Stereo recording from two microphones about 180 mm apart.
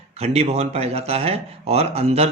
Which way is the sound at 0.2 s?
35° right (ahead or behind).